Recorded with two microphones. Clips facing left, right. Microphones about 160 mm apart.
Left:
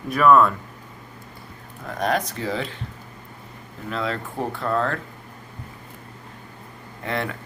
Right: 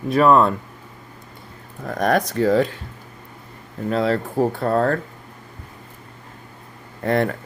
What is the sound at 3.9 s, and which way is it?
Speech, 40° right (ahead or behind).